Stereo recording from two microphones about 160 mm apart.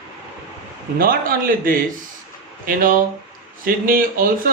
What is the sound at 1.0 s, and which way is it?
Speech, 65° right (ahead or behind).